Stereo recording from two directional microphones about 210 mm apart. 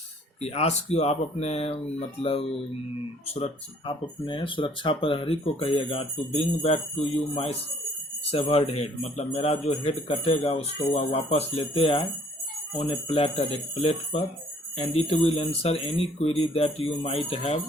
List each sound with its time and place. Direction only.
0.4 s speech: 30° left (ahead or behind)